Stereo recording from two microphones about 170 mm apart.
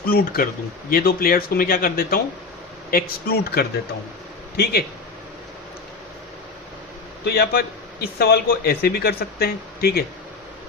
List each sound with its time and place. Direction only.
0.1 s speech: 65° left (ahead or behind)
7.3 s speech: 65° left (ahead or behind)